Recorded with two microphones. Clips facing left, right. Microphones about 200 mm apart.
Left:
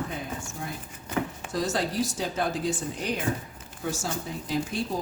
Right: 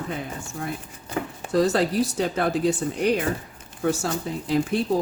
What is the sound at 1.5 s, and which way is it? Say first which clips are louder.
Speech: right 8 dB; 60° right (ahead or behind).